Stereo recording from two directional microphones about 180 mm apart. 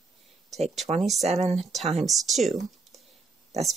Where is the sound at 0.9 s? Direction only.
30° right (ahead or behind).